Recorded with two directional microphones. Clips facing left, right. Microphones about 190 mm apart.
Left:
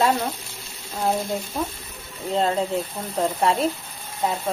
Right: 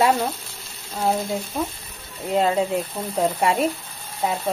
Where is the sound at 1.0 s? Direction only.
Centre (ahead or behind).